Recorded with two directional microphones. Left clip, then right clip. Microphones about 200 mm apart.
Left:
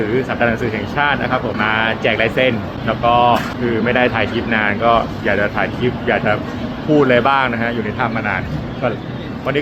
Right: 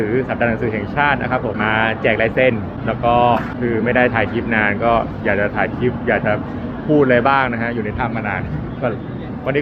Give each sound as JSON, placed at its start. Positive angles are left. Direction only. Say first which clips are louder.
{"t": 0.2, "sound": "speech", "louder": "left 1 dB", "side_deg": 15}